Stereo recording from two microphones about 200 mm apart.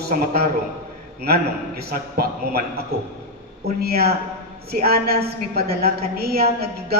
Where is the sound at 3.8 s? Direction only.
50° right (ahead or behind).